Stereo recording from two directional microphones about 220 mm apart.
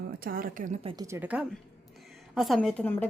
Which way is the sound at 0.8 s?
15° right (ahead or behind).